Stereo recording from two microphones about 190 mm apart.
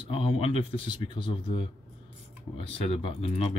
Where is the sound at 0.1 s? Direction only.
30° left (ahead or behind).